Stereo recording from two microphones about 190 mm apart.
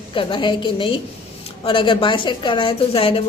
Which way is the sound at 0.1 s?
25° left (ahead or behind).